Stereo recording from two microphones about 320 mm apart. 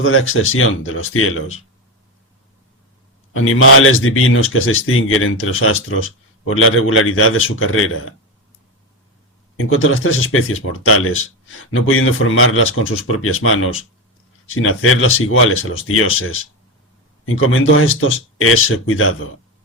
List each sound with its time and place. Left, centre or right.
0.0 s speech: left
3.3 s speech: left
9.6 s speech: left